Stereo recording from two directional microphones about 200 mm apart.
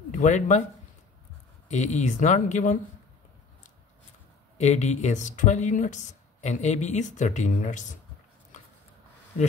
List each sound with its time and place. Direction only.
0.1 s speech: 35° left (ahead or behind)
1.7 s speech: 35° left (ahead or behind)
4.6 s speech: 35° left (ahead or behind)